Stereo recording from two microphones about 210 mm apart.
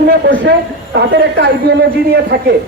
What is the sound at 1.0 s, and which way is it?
Speech, 50° right (ahead or behind).